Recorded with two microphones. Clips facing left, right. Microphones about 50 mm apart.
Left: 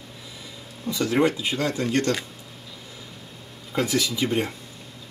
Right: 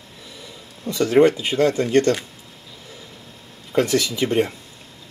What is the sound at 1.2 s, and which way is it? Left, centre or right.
Speech, right.